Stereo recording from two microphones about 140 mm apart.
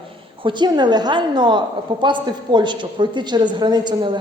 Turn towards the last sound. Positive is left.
turn(degrees=-30)  # may be behind; listen again after turning